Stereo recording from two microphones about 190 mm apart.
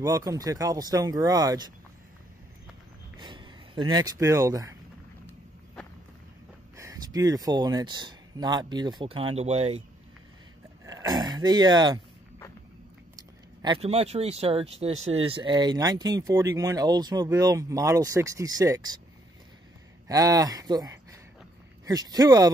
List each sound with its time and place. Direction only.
0.0 s speech: 15° right (ahead or behind)
3.2 s a sound: 25° right (ahead or behind)
3.9 s speech: 20° right (ahead or behind)
6.8 s speech: 20° right (ahead or behind); by 9.8 s 35° right (ahead or behind)
10.9 s speech: 20° right (ahead or behind)
13.7 s speech: 30° right (ahead or behind)
20.1 s speech: 20° right (ahead or behind)